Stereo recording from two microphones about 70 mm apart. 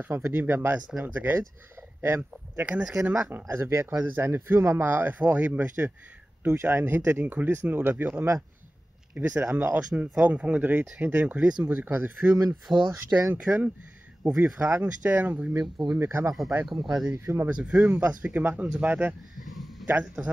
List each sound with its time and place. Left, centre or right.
0.0 s speech: right
2.6 s speech: right
3.2 s speech: right
9.9 s speech: right
12.7 s speech: right
13.3 s speech: right
16.0 s speech: right
16.6 s speech: centre
17.1 s speech: right
17.5 s speech: centre
19.4 s a sound: centre
19.9 s speech: right